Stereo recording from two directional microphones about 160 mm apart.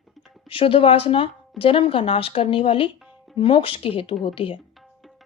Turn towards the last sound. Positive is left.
turn(degrees=35)  # may be behind; listen again after turning